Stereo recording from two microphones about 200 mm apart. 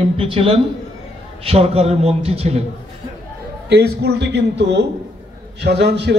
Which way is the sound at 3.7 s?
55° right (ahead or behind).